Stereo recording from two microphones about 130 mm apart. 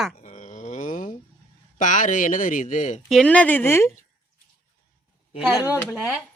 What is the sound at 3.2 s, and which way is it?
Speech, 10° left (ahead or behind).